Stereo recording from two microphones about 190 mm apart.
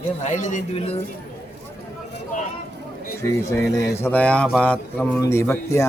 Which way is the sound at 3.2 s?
15° left (ahead or behind).